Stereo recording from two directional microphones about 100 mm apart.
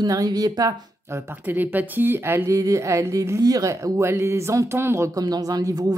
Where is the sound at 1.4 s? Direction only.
20° right (ahead or behind).